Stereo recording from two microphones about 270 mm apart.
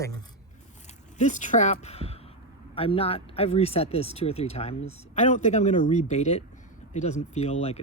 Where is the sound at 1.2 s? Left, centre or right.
Left.